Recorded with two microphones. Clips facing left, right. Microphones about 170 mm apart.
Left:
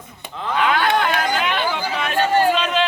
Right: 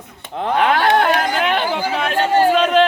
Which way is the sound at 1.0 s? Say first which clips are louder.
Right 3 dB; 50° right (ahead or behind).